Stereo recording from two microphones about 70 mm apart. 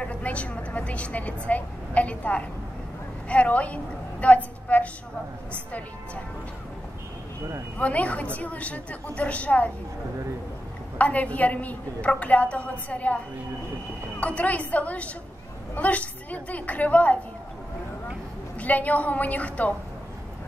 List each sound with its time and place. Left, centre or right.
0.0 s a woman's voice: centre
7.8 s a woman's voice: centre
11.0 s a woman's voice: centre
14.2 s a woman's voice: left
18.6 s a woman's voice: left